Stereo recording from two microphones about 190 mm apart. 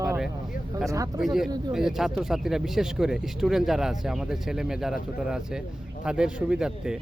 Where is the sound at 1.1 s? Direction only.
Centre (ahead or behind).